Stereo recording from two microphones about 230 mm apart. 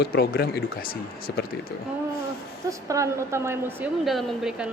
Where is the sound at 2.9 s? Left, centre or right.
Centre.